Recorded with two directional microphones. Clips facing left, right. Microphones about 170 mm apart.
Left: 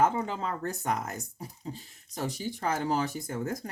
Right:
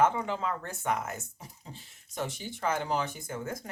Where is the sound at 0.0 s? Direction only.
40° left (ahead or behind).